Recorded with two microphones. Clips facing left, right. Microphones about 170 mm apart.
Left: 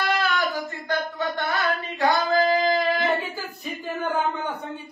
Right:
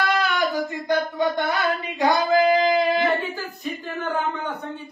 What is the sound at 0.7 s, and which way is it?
Singing, 15° right (ahead or behind).